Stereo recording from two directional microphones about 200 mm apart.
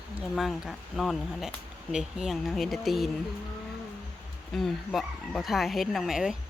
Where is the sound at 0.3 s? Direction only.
Centre (ahead or behind).